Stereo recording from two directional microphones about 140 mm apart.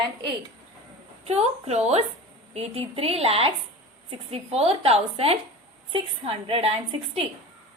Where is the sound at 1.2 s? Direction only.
50° right (ahead or behind).